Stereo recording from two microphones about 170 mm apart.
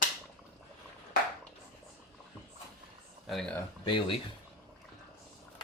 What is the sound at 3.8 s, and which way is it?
Speech, 30° left (ahead or behind).